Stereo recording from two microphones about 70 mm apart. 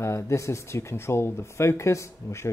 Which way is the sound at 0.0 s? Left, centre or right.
Left.